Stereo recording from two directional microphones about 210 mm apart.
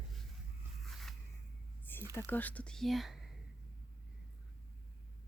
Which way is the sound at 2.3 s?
10° left (ahead or behind).